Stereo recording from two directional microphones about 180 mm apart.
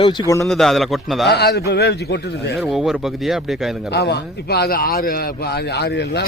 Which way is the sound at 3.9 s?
65° left (ahead or behind).